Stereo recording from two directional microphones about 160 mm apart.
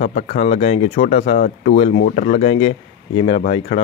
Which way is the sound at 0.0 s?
45° left (ahead or behind).